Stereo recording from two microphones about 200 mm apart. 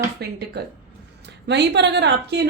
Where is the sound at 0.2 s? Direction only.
55° right (ahead or behind).